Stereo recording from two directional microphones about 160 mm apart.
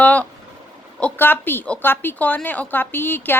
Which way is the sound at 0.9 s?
10° left (ahead or behind).